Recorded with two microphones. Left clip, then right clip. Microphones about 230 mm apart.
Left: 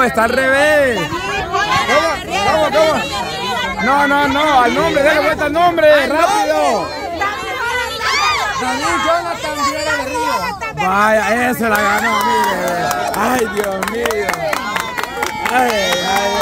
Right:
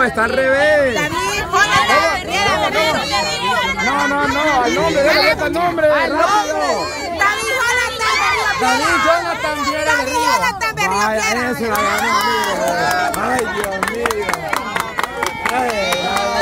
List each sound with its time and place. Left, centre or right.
0.0 s speech: left
2.0 s a sound: right
4.1 s speech: left
5.9 s speech: centre
10.2 s speech: right
10.9 s speech: left
12.1 s speech: centre